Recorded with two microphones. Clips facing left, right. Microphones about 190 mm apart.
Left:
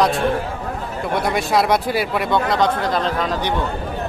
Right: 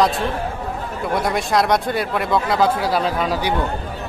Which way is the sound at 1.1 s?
Centre (ahead or behind).